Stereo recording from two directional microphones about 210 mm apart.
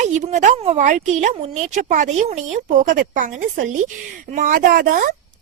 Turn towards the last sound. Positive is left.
turn(degrees=-40)  # may be behind; listen again after turning